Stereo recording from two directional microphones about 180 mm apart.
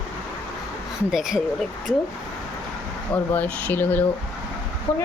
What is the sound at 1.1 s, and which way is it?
Speech, 5° right (ahead or behind).